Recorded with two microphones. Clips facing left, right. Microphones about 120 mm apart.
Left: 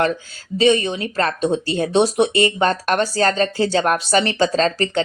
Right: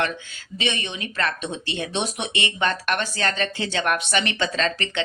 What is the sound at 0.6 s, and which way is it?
Speech, 35° left (ahead or behind).